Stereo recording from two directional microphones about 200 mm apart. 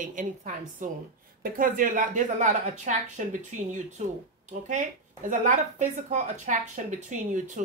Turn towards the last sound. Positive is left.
turn(degrees=-40)  # may be behind; listen again after turning